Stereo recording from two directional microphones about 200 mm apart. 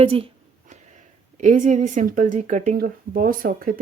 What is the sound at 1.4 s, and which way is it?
Speech, 40° right (ahead or behind).